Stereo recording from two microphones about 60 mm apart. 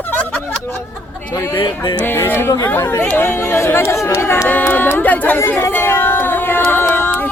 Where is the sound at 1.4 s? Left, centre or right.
Left.